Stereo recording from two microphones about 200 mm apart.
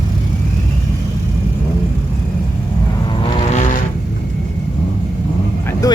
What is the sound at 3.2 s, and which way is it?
Vehicle, 35° left (ahead or behind).